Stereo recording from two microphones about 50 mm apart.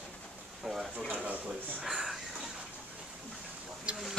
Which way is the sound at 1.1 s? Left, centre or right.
Right.